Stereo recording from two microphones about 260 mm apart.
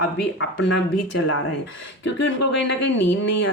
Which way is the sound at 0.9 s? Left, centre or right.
Left.